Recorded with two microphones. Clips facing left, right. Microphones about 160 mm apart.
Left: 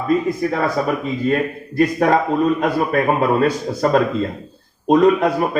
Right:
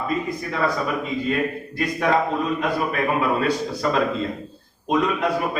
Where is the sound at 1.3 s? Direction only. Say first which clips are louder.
Left 5 dB; 45° left (ahead or behind).